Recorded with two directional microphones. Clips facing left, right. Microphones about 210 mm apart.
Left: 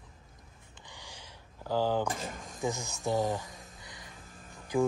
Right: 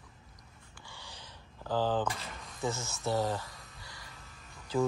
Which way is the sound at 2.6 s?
15° left (ahead or behind).